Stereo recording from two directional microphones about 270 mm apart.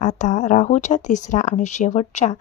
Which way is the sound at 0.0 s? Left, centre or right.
Left.